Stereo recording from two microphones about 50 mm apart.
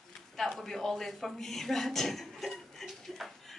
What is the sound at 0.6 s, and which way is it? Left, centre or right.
A woman's voice, centre.